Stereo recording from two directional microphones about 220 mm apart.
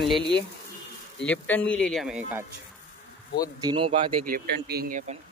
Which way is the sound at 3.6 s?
20° right (ahead or behind).